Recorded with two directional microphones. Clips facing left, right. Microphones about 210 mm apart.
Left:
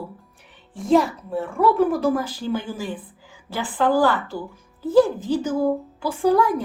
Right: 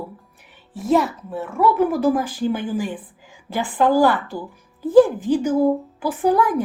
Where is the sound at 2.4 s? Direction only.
15° right (ahead or behind).